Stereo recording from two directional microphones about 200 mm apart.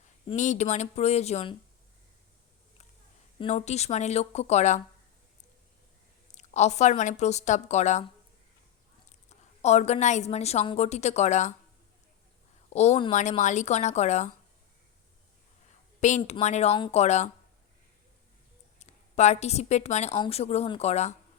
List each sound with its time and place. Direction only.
0.3 s a woman's voice: 35° left (ahead or behind)
3.3 s a woman's voice: 30° left (ahead or behind)
6.3 s a woman's voice: 35° left (ahead or behind)
9.0 s a woman's voice: 35° left (ahead or behind)
12.7 s a woman's voice: 35° left (ahead or behind)
16.0 s a woman's voice: 35° left (ahead or behind)
18.8 s a woman's voice: 35° left (ahead or behind)